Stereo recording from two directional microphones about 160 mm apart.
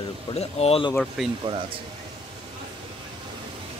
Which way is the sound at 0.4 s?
40° left (ahead or behind).